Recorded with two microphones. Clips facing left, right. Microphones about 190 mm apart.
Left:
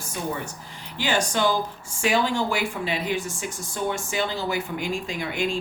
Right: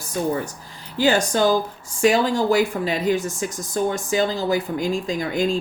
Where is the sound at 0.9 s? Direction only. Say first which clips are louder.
Right 6 dB; 40° right (ahead or behind).